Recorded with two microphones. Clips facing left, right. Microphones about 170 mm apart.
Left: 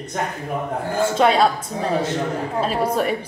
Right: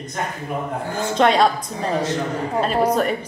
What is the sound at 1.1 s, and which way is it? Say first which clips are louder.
Speech: right 2 dB; 5° left (ahead or behind).